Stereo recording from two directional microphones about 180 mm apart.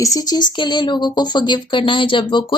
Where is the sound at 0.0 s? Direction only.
20° left (ahead or behind).